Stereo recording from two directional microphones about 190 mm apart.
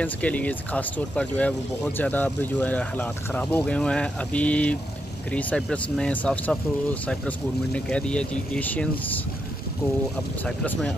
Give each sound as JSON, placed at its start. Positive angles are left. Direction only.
{"t": 0.0, "sound": "speech", "side_deg": 5}
{"t": 10.4, "sound": "speech", "side_deg": 10}